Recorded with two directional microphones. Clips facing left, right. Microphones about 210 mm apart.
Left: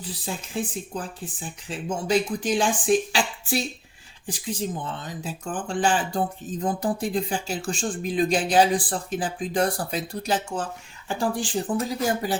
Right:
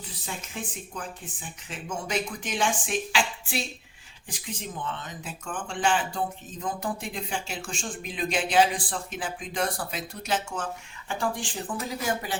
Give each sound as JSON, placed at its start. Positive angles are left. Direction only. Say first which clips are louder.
{"t": 0.0, "sound": "speech", "louder": "left 5 dB", "side_deg": 35}